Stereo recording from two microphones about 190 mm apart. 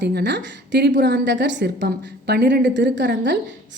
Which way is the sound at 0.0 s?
65° right (ahead or behind).